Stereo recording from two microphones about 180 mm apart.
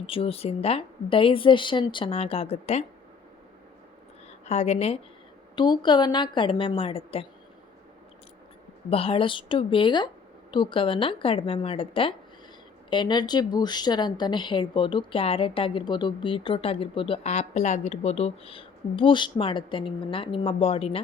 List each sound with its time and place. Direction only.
0.0 s speech: 30° left (ahead or behind)
4.4 s speech: 35° left (ahead or behind)
5.5 s a woman's voice: 25° left (ahead or behind)
8.9 s a woman's voice: 30° left (ahead or behind)